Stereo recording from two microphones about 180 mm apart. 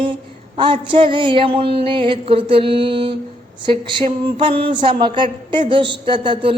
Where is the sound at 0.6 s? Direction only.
25° right (ahead or behind).